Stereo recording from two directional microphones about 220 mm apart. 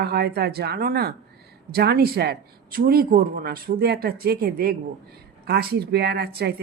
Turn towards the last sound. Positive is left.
turn(degrees=-45)  # may be behind; listen again after turning